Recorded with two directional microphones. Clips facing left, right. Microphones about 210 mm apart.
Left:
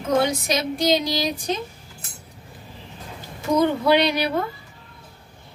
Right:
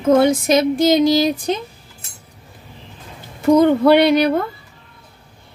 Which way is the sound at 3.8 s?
55° right (ahead or behind).